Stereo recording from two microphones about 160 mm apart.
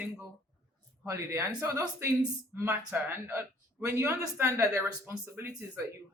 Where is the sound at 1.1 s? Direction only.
15° right (ahead or behind).